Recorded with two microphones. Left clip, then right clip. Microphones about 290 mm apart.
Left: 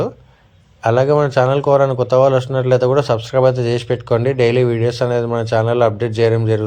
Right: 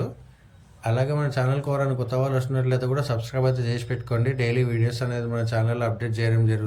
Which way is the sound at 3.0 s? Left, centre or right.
Centre.